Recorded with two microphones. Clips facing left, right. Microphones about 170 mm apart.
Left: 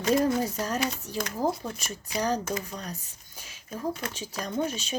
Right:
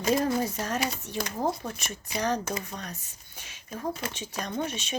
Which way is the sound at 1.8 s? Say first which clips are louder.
Left 1 dB; 35° left (ahead or behind).